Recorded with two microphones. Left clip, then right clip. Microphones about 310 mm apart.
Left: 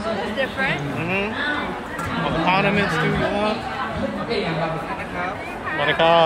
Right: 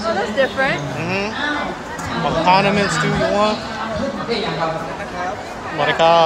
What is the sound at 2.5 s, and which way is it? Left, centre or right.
Speech, centre.